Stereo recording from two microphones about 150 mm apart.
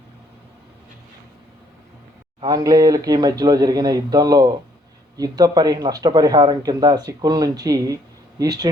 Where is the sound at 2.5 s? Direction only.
25° right (ahead or behind).